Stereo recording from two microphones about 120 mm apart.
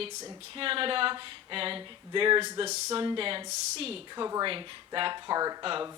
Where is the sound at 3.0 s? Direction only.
45° right (ahead or behind).